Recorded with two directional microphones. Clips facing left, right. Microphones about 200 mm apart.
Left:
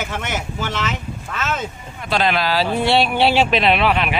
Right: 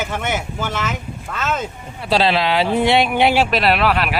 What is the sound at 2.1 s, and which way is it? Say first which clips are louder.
Speech: right 2 dB; 30° right (ahead or behind).